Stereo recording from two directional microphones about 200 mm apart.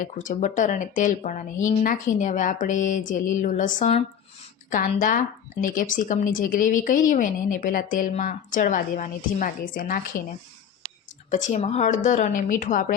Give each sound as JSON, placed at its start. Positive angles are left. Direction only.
{"t": 0.0, "sound": "speech", "side_deg": 40}
{"t": 11.3, "sound": "speech", "side_deg": 40}